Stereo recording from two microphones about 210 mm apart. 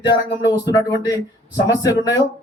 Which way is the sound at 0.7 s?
15° left (ahead or behind).